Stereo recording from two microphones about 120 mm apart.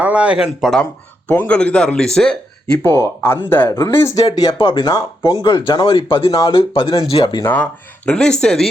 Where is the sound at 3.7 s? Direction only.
30° left (ahead or behind).